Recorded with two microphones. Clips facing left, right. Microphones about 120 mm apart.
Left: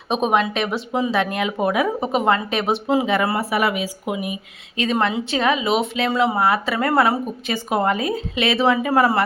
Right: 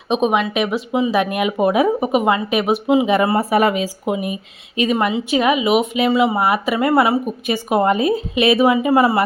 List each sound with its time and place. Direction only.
0.1 s speech: centre (ahead or behind)
1.1 s speech: 15° right (ahead or behind)
3.3 s speech: 40° right (ahead or behind)
4.8 s speech: 10° right (ahead or behind)